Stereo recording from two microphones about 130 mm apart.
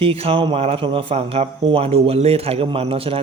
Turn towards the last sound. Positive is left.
turn(degrees=-45)  # may be behind; listen again after turning